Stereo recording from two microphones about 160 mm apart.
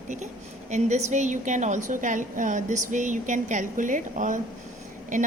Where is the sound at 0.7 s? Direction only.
45° right (ahead or behind).